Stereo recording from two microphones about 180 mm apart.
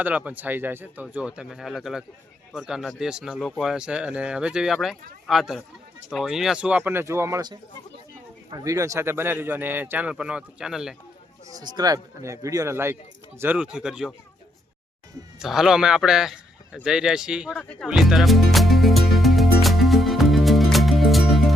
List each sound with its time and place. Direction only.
0.0 s a man's voice: 10° right (ahead or behind)
11.4 s a man's voice: 20° right (ahead or behind); by 14.1 s 5° right (ahead or behind)
15.4 s a man's voice: centre (ahead or behind)
17.6 s speech: 10° left (ahead or behind)
17.8 s music: 5° right (ahead or behind)